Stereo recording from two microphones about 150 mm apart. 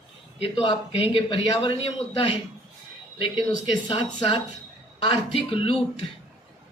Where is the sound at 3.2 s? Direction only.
30° left (ahead or behind).